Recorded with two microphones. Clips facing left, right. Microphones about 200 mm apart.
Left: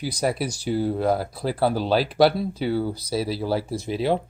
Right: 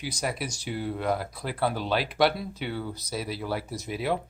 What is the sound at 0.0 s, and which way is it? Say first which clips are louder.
Speech: left 7 dB; 35° left (ahead or behind).